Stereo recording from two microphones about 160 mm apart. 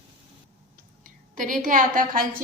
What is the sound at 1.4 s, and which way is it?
Speech, 55° right (ahead or behind).